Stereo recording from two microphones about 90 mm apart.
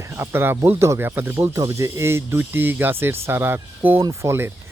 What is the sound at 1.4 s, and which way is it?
Speech, 35° right (ahead or behind).